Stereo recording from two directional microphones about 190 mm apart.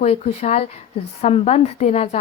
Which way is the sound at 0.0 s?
35° left (ahead or behind).